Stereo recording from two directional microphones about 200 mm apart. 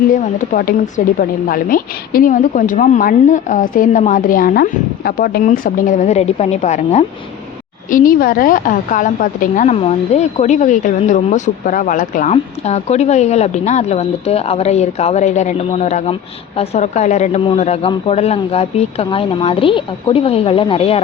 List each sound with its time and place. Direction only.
0.1 s a woman's voice: 45° left (ahead or behind)